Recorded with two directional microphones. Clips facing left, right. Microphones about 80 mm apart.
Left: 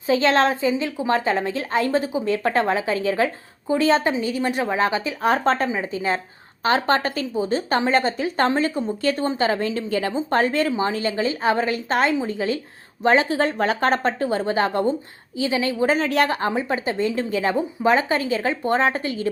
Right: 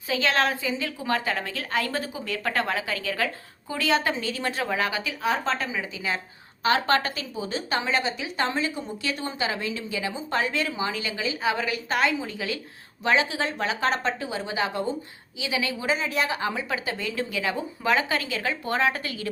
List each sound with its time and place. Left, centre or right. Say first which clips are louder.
0.1 s a woman's voice: left 6 dB; left
4.2 s a woman's voice: left 6 dB; centre
5.2 s a woman's voice: left 7 dB; left
15.4 s speech: left 8 dB; left
15.9 s speech: left 4 dB; left
16.5 s a woman's voice: left 6 dB; left